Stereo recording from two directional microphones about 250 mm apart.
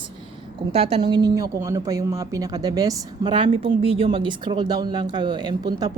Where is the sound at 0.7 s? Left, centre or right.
Right.